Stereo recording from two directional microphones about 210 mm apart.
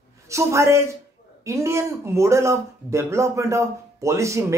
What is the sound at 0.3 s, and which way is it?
Speech, 15° right (ahead or behind).